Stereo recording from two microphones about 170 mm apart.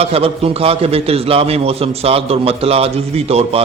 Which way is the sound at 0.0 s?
35° right (ahead or behind).